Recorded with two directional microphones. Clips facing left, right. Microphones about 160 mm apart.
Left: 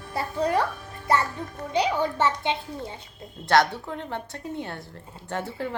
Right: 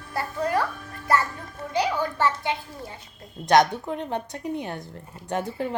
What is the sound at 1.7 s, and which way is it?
Speech, 20° left (ahead or behind).